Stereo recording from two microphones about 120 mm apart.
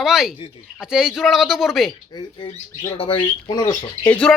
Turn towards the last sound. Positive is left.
turn(degrees=10)  # may be behind; listen again after turning